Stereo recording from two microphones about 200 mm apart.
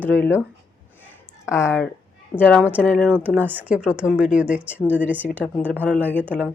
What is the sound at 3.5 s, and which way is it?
Speech, 10° right (ahead or behind).